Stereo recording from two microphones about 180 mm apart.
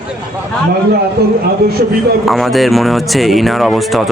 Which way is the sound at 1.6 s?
60° right (ahead or behind).